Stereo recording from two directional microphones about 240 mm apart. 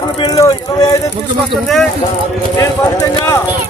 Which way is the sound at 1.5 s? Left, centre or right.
Centre.